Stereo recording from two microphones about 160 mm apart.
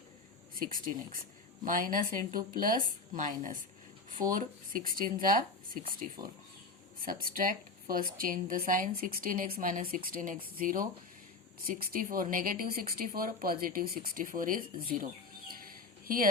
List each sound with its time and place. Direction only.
1.6 s speech: 60° right (ahead or behind)
7.3 s speech: 60° right (ahead or behind)
16.0 s a woman's voice: 60° right (ahead or behind)